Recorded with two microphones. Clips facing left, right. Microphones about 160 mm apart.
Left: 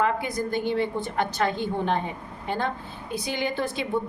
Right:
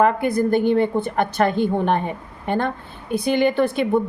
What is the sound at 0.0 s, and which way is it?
A woman's voice, 55° right (ahead or behind).